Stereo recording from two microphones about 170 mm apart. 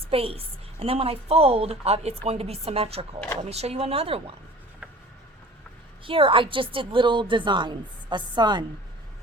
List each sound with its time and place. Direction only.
0.1 s a woman's voice: 35° right (ahead or behind)
6.1 s a woman's voice: 30° right (ahead or behind)